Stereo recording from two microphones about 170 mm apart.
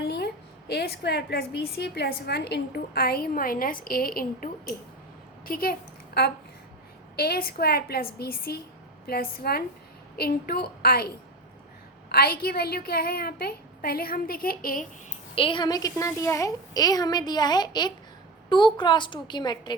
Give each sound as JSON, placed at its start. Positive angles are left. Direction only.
{"t": 0.0, "sound": "a sound", "side_deg": 75}
{"t": 0.7, "sound": "a woman's voice", "side_deg": 70}
{"t": 7.2, "sound": "a woman's voice", "side_deg": 65}
{"t": 15.4, "sound": "a woman's voice", "side_deg": 30}